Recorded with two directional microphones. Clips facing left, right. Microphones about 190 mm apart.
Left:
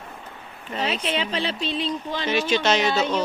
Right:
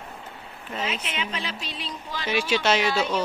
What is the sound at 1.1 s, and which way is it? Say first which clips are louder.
Speech: left 6 dB; 30° left (ahead or behind).